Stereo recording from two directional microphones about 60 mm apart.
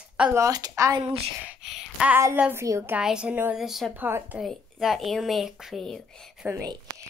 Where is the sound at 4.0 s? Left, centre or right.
Right.